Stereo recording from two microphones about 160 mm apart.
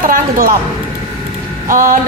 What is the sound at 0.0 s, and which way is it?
Speech, 60° right (ahead or behind).